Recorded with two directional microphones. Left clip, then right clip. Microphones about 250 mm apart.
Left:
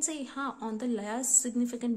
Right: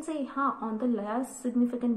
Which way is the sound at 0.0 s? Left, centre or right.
Left.